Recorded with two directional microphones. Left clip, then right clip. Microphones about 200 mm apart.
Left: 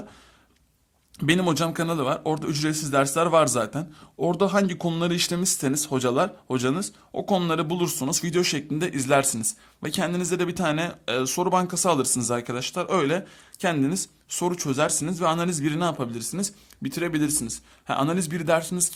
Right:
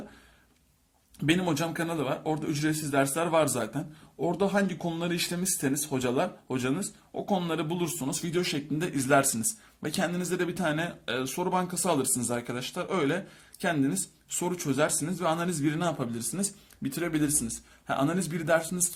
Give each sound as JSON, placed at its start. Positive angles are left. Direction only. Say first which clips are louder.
{"t": 1.2, "sound": "a man's voice", "louder": "left 5 dB", "side_deg": 45}